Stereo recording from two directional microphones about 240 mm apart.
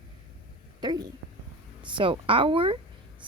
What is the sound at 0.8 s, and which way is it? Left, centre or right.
A woman's voice, centre.